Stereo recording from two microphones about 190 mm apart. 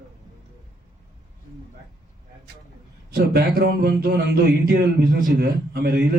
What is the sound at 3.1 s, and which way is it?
Speech, 55° right (ahead or behind).